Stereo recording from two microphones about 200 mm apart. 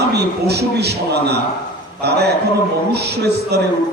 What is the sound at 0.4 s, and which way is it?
A man's voice, 55° right (ahead or behind).